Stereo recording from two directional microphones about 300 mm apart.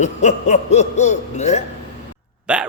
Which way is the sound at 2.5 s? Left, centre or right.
Centre.